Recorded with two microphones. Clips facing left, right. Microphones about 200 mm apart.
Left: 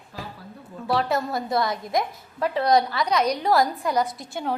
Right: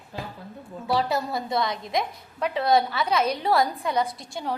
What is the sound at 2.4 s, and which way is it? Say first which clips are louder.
A woman's voice: left 1 dB; centre (ahead or behind).